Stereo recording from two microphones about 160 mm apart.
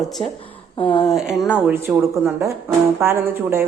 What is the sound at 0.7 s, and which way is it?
Speech, 30° left (ahead or behind).